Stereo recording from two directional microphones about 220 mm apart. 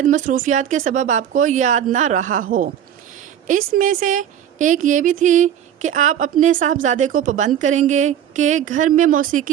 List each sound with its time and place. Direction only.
0.0 s a woman's voice: 35° right (ahead or behind)
3.8 s a woman's voice: 35° right (ahead or behind)